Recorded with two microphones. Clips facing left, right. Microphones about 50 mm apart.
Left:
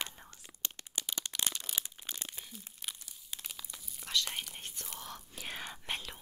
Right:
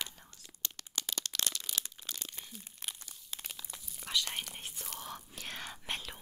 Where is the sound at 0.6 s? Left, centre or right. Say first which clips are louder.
Even; centre.